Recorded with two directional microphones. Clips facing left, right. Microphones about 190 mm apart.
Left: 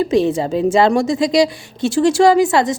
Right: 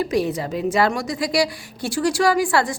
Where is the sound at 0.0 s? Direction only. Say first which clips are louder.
Left 6 dB; 25° left (ahead or behind).